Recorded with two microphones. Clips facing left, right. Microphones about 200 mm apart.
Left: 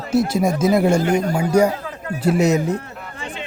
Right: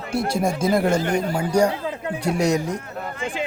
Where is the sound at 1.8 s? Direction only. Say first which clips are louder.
Right 2 dB; 20° right (ahead or behind).